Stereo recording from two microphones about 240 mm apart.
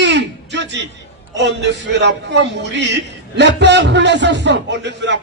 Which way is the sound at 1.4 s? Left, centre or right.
Right.